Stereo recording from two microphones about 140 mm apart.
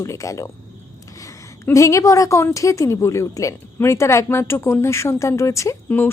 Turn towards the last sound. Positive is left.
turn(degrees=15)  # may be behind; listen again after turning